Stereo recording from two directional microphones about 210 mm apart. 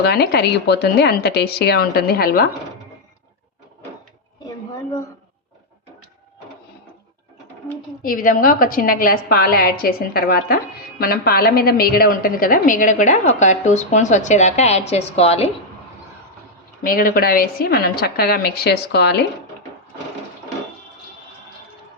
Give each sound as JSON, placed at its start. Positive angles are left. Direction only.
{"t": 0.1, "sound": "a woman's voice", "side_deg": 50}
{"t": 8.0, "sound": "a woman's voice", "side_deg": 40}
{"t": 16.8, "sound": "a woman's voice", "side_deg": 45}